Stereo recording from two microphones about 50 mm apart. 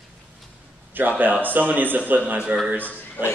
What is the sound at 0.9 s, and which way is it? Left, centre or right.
A man's voice, right.